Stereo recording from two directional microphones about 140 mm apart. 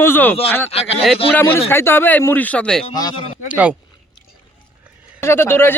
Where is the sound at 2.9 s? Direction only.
30° left (ahead or behind).